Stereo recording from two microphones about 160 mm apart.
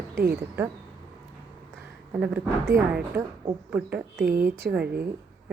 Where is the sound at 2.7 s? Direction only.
20° right (ahead or behind).